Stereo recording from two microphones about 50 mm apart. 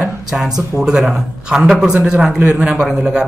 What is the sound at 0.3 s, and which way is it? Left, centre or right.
A man's voice, centre.